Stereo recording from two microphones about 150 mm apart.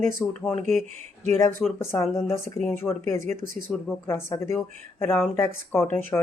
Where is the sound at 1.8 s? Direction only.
15° left (ahead or behind).